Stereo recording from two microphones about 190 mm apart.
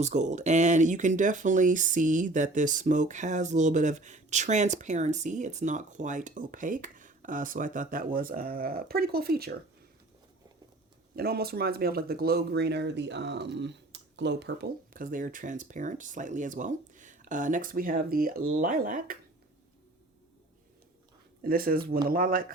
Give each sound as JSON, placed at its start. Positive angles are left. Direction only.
{"t": 0.0, "sound": "speech", "side_deg": -40}
{"t": 11.1, "sound": "speech", "side_deg": -55}
{"t": 21.4, "sound": "speech", "side_deg": -50}